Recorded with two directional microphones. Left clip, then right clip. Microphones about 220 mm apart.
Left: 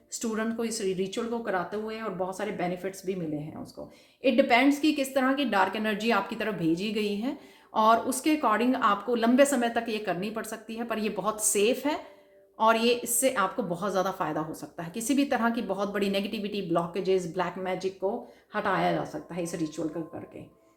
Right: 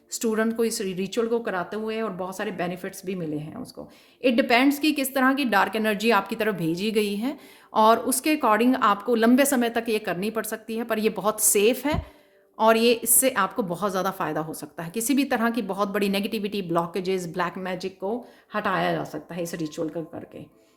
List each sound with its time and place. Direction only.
0.1 s a woman's voice: 50° right (ahead or behind)
4.2 s a woman's voice: 50° right (ahead or behind)